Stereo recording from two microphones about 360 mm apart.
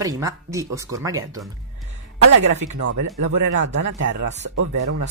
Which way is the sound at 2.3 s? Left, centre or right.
Right.